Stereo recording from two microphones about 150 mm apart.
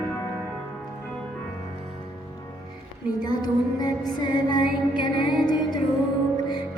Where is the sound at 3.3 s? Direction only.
25° left (ahead or behind).